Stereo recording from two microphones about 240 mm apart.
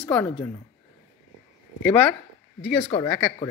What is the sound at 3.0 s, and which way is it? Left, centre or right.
Speech, centre.